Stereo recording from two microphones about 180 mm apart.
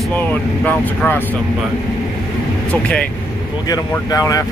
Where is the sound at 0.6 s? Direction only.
10° left (ahead or behind).